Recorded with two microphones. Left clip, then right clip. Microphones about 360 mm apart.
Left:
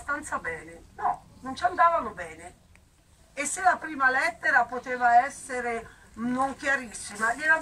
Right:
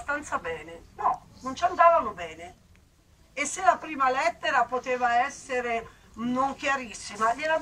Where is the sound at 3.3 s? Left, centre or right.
Centre.